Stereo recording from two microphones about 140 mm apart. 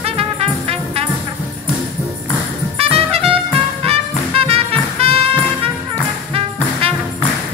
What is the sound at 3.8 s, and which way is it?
Music, 45° right (ahead or behind).